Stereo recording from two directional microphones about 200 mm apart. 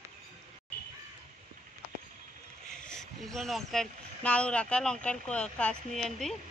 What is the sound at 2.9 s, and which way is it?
Speech, centre (ahead or behind).